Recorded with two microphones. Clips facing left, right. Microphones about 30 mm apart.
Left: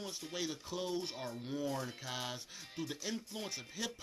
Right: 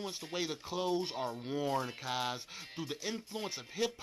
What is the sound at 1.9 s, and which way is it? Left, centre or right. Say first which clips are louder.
Speech: right 5 dB; right.